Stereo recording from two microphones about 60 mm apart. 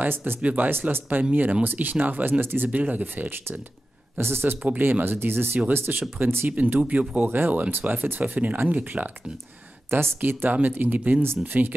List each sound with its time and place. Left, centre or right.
0.0 s speech: right
0.7 s speech: right
4.6 s speech: right
9.9 s speech: right
10.5 s speech: right